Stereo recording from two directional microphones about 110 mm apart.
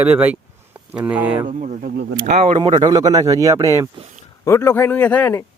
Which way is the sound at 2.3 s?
75° right (ahead or behind).